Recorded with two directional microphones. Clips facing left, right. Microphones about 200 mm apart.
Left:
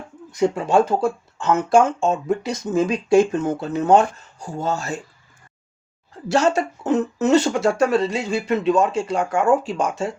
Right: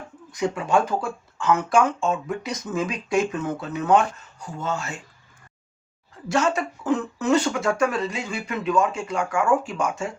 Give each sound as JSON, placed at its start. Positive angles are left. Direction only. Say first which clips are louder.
{"t": 0.3, "sound": "speech", "louder": "left 5 dB", "side_deg": 25}
{"t": 6.3, "sound": "speech", "louder": "left 4 dB", "side_deg": 35}